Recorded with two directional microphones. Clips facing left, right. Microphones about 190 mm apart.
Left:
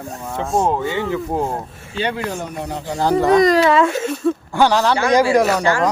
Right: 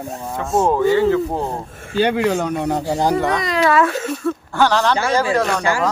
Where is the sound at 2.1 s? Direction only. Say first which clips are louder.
Right 7 dB; 75° right (ahead or behind).